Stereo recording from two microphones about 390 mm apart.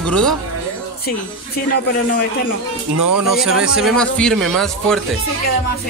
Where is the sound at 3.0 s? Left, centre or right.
Right.